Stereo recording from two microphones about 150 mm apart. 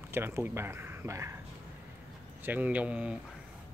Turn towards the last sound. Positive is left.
turn(degrees=-10)  # may be behind; listen again after turning